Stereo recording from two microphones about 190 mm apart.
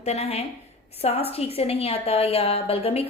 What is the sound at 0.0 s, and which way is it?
A woman's voice, 35° left (ahead or behind).